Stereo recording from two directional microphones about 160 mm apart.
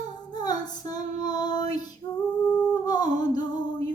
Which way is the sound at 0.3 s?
25° left (ahead or behind).